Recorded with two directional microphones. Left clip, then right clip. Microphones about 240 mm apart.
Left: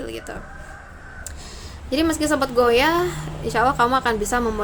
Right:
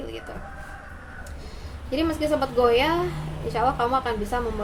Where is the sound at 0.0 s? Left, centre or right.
Left.